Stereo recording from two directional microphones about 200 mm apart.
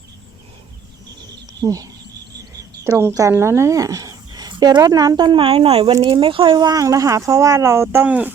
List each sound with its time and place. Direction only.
1.6 s speech: 20° right (ahead or behind)